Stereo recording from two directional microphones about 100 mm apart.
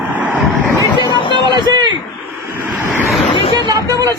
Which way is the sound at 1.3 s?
50° right (ahead or behind).